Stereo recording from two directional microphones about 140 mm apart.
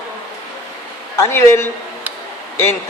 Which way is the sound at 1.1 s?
20° left (ahead or behind).